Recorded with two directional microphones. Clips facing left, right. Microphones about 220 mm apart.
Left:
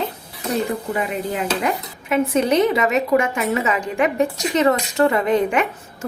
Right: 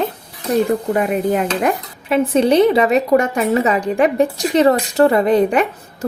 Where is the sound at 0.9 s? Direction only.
50° right (ahead or behind).